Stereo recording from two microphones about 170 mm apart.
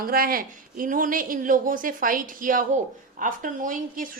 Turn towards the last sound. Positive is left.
turn(degrees=-55)  # may be behind; listen again after turning